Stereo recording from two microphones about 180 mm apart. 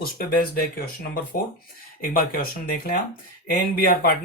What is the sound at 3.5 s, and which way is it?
Speech, 55° left (ahead or behind).